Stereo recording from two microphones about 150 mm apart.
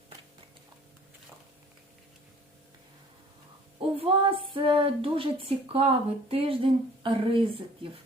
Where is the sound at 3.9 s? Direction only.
35° right (ahead or behind).